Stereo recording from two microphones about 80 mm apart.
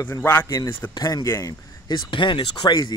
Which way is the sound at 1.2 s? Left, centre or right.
Left.